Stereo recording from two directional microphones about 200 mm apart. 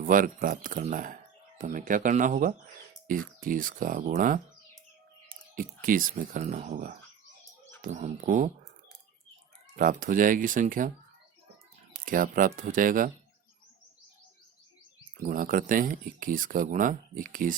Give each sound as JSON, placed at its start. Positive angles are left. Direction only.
{"t": 0.0, "sound": "speech", "side_deg": -40}
{"t": 9.7, "sound": "speech", "side_deg": -40}
{"t": 12.0, "sound": "speech", "side_deg": -45}
{"t": 15.2, "sound": "speech", "side_deg": -40}